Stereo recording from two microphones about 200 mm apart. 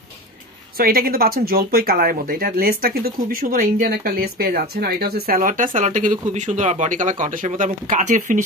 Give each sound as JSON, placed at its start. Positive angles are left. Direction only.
{"t": 0.7, "sound": "speech", "side_deg": -45}